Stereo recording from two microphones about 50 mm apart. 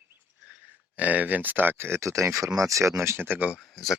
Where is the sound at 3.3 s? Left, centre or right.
Right.